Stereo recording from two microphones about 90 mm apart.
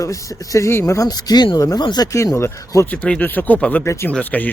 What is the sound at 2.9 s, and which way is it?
Speech, 15° left (ahead or behind).